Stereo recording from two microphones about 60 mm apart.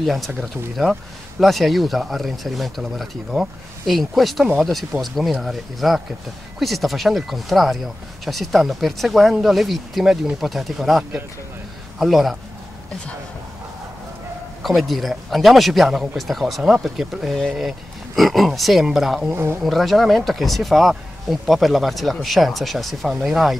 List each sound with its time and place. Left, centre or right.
0.0 s speech: centre
14.6 s speech: centre
19.3 s speech: right
19.6 s speech: centre